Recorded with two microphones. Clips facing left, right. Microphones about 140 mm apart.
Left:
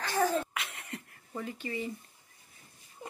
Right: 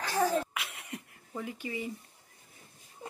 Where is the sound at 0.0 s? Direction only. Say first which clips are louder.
Even; 5° right (ahead or behind).